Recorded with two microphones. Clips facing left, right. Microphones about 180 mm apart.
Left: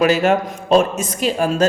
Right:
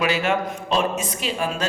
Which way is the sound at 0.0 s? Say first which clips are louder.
Left 7 dB; 40° left (ahead or behind).